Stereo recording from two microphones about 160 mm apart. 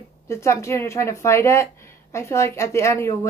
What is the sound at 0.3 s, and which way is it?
Speech, 15° left (ahead or behind).